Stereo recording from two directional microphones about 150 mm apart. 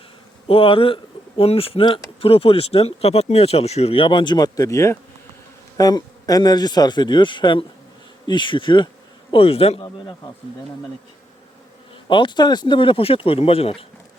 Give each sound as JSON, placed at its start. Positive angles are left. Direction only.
{"t": 0.4, "sound": "speech", "side_deg": 35}
{"t": 12.0, "sound": "speech", "side_deg": 35}